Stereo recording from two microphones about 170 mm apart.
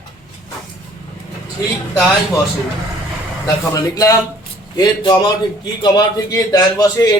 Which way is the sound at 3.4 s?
20° left (ahead or behind).